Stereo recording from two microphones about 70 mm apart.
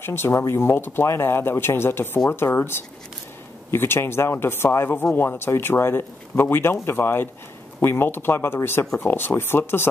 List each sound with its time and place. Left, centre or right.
0.0 s speech: left